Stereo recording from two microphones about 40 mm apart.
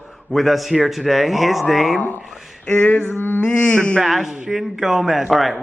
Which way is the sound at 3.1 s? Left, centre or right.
Left.